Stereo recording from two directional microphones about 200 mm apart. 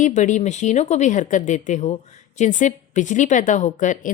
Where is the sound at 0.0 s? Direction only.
40° left (ahead or behind).